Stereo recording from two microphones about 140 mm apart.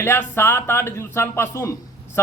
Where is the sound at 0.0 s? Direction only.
15° left (ahead or behind).